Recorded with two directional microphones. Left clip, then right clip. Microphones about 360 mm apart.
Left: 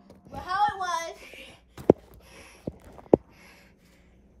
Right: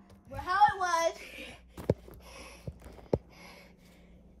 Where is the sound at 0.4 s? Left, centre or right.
Centre.